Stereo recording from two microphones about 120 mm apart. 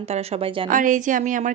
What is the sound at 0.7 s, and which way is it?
Speech, 90° right.